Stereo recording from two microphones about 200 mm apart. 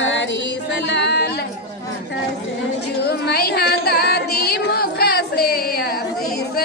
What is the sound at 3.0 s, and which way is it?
Singing, 55° left (ahead or behind).